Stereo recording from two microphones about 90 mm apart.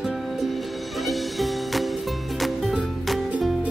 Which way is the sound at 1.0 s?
Centre (ahead or behind).